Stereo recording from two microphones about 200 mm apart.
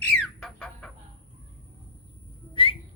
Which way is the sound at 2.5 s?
25° left (ahead or behind).